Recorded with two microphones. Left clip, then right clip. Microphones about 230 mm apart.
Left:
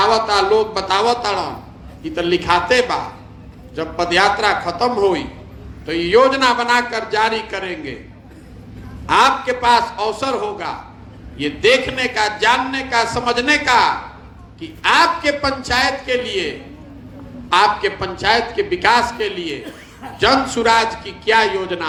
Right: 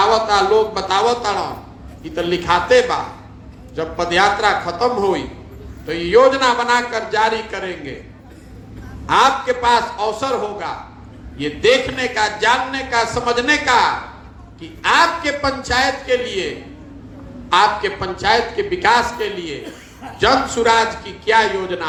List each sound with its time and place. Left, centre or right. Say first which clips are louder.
0.0 s speech: even; left
9.0 s speech: even; left